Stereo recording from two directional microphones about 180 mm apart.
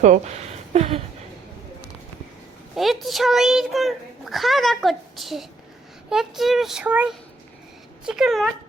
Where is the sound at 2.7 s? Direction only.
Centre (ahead or behind).